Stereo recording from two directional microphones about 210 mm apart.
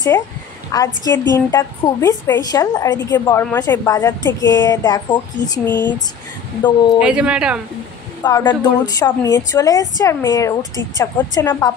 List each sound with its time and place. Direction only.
0.7 s a woman's voice: 15° left (ahead or behind)
7.0 s speech: 5° right (ahead or behind)
8.2 s a woman's voice: 15° left (ahead or behind)